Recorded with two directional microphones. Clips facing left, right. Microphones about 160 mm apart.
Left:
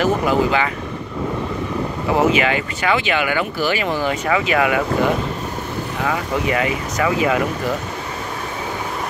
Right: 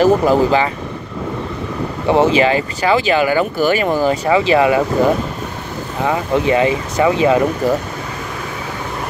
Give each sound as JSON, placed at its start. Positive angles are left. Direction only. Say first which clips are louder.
{"t": 0.0, "sound": "speech", "louder": "right 5 dB", "side_deg": -35}
{"t": 2.0, "sound": "speech", "louder": "right 5 dB", "side_deg": -30}
{"t": 6.0, "sound": "speech", "louder": "right 6 dB", "side_deg": -25}